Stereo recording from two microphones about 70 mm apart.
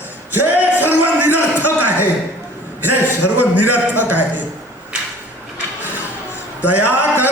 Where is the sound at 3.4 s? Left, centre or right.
Right.